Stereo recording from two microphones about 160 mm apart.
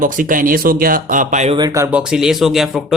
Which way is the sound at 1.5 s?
20° right (ahead or behind).